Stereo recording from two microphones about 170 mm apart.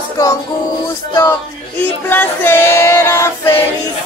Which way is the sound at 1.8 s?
10° left (ahead or behind).